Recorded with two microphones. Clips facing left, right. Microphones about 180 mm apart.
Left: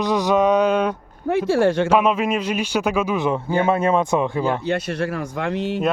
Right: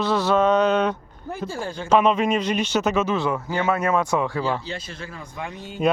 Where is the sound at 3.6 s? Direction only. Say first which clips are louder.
Left 2 dB; 30° left (ahead or behind).